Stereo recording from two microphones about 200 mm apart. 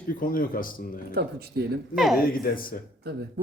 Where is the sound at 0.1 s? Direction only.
45° left (ahead or behind).